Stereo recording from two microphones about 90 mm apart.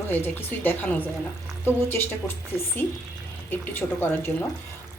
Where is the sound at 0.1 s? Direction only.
20° left (ahead or behind).